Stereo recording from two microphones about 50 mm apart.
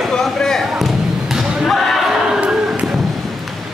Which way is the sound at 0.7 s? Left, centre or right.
Centre.